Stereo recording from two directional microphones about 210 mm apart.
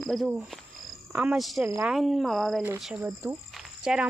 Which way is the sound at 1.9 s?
Centre (ahead or behind).